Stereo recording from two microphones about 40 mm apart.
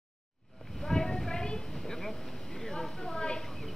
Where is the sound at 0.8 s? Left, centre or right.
Centre.